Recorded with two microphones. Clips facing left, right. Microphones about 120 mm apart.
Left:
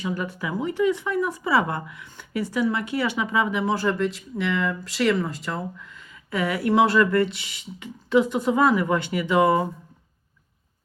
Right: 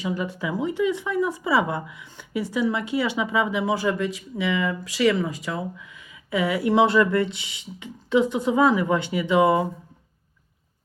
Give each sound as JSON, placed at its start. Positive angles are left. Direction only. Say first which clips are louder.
{"t": 0.0, "sound": "speech", "louder": "right 1 dB", "side_deg": -20}